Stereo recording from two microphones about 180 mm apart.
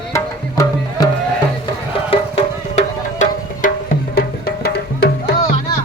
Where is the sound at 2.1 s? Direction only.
35° left (ahead or behind); by 5.3 s 65° left (ahead or behind).